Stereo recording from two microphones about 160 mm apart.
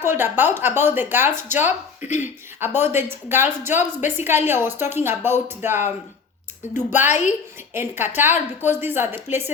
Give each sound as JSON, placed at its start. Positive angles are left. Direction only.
{"t": 0.0, "sound": "a woman's voice", "side_deg": -15}
{"t": 2.0, "sound": "speech", "side_deg": 50}
{"t": 2.6, "sound": "a woman's voice", "side_deg": -15}